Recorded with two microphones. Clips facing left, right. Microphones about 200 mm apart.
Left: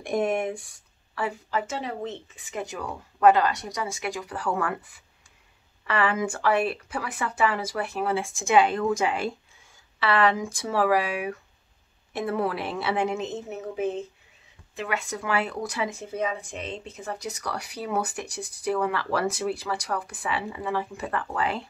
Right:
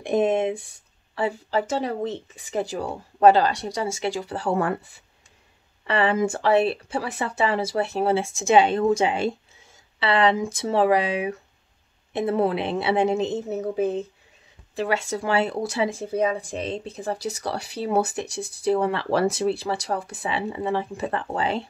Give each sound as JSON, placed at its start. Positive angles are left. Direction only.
{"t": 0.0, "sound": "speech", "side_deg": -20}